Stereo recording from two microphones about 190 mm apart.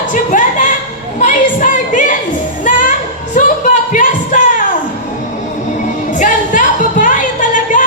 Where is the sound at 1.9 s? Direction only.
40° left (ahead or behind).